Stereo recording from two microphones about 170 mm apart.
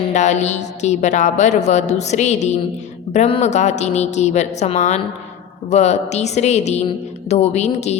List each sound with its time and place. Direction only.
0.1 s a woman's voice: 45° left (ahead or behind)